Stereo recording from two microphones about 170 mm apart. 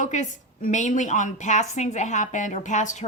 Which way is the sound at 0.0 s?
45° left (ahead or behind).